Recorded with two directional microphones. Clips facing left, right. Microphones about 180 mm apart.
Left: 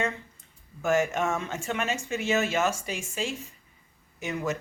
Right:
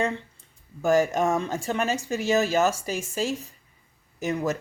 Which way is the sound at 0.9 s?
35° right (ahead or behind).